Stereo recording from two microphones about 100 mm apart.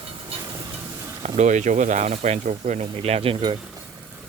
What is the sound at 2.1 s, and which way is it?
Speech, 90° right.